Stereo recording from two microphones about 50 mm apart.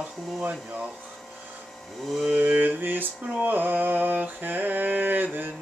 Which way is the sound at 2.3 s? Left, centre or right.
Right.